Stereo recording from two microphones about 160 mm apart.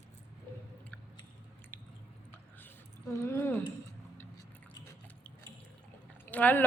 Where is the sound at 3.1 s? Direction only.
15° left (ahead or behind).